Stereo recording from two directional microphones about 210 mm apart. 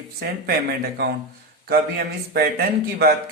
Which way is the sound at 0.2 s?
50° right (ahead or behind).